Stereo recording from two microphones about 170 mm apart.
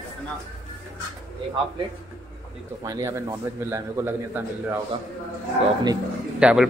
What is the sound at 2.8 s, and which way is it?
A man's voice, 20° right (ahead or behind).